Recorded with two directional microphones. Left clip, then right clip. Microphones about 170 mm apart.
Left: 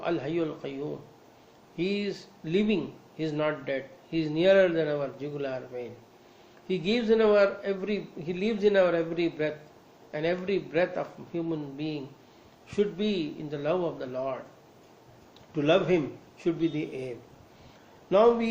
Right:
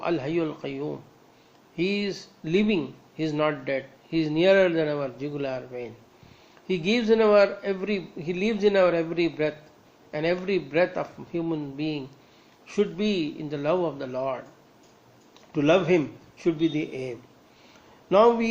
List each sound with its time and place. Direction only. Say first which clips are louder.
0.0 s speech: right 3 dB; 50° right (ahead or behind)
15.5 s speech: right 3 dB; 50° right (ahead or behind)